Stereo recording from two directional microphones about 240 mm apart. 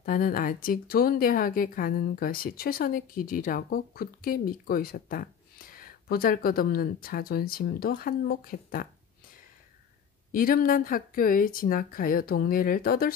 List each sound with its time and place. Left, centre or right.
0.0 s a woman's voice: left
10.3 s a woman's voice: left